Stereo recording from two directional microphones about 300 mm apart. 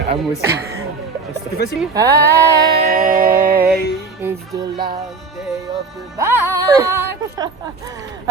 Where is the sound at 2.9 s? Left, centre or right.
Right.